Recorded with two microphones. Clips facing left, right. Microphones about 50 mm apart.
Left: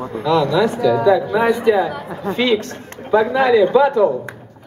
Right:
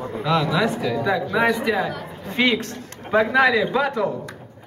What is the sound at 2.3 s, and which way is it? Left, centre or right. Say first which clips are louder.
Music: left 2 dB; right.